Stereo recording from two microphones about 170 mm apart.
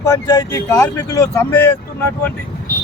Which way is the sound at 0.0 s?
15° left (ahead or behind).